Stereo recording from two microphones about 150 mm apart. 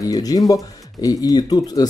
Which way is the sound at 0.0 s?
25° left (ahead or behind).